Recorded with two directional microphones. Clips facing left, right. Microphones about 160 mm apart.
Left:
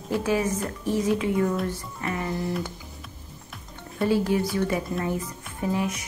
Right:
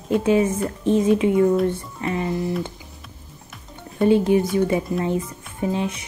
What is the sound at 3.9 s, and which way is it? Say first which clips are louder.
Speech: right 6 dB; 20° right (ahead or behind).